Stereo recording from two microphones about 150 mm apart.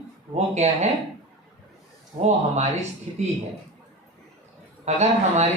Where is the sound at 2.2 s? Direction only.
50° right (ahead or behind).